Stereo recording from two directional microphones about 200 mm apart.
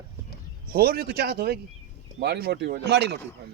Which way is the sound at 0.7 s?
50° right (ahead or behind).